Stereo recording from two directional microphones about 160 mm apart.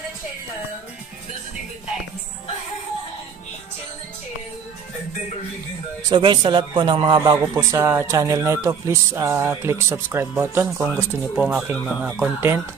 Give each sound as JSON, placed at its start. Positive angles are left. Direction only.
{"t": 6.0, "sound": "a man's voice", "side_deg": -30}